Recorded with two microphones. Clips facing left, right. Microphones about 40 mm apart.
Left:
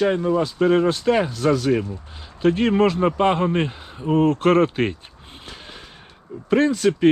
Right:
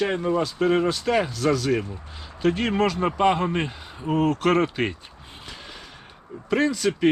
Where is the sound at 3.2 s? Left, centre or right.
Centre.